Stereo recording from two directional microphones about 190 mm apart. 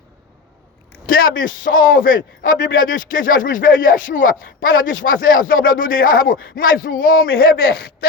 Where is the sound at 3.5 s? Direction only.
45° left (ahead or behind).